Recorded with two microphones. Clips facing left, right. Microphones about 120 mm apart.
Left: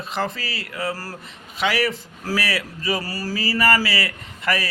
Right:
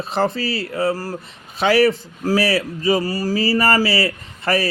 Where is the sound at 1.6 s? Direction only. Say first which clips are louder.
Right 7 dB; 30° right (ahead or behind).